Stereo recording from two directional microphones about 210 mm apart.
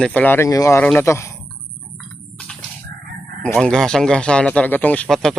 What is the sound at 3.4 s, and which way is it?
Speech, 5° left (ahead or behind).